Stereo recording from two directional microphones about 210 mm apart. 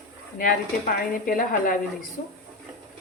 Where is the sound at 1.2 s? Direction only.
40° left (ahead or behind).